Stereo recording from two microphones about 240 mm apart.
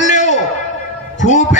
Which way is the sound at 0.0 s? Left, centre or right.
Left.